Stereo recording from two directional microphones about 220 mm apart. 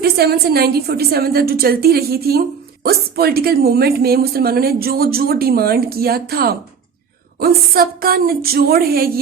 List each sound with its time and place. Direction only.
0.0 s speech: 45° right (ahead or behind)